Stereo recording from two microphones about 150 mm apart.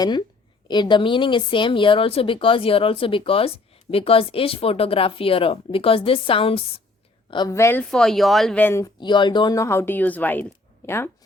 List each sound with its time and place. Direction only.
0.0 s a woman's voice: 30° left (ahead or behind)
7.5 s speech: 15° left (ahead or behind)
7.9 s speech: 5° left (ahead or behind)
8.6 s speech: 20° left (ahead or behind)
9.0 s speech: 30° left (ahead or behind)